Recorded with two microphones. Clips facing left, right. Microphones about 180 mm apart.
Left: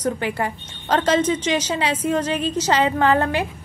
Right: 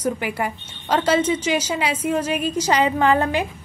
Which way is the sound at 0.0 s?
10° right (ahead or behind).